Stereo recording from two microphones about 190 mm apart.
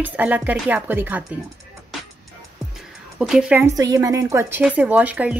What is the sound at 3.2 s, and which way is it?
A woman's voice, 5° right (ahead or behind).